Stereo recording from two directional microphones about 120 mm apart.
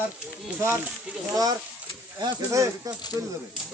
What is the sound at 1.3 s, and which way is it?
Speech, 30° right (ahead or behind).